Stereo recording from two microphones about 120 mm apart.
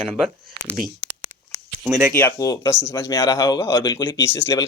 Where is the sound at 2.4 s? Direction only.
30° left (ahead or behind).